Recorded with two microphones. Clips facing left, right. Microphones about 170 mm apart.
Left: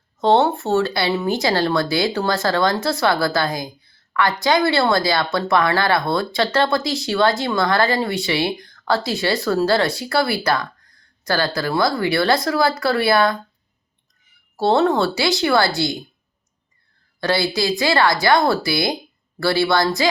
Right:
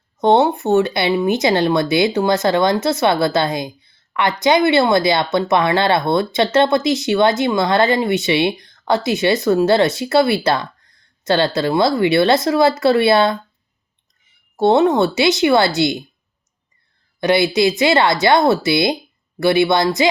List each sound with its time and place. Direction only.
0.2 s speech: 15° right (ahead or behind)
14.5 s speech: 20° right (ahead or behind)
17.2 s speech: 20° right (ahead or behind)